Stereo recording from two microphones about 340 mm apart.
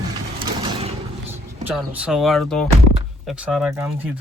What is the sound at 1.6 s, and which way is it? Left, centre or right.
Speech, centre.